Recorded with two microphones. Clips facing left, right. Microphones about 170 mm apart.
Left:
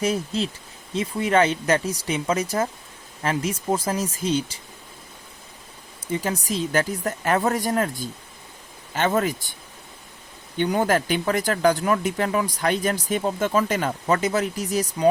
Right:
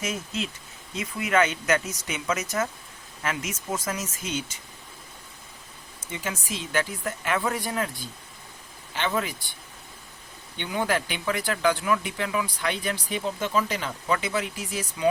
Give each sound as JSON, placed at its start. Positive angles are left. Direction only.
{"t": 0.0, "sound": "speech", "side_deg": 35}
{"t": 6.0, "sound": "speech", "side_deg": 35}
{"t": 10.6, "sound": "speech", "side_deg": 45}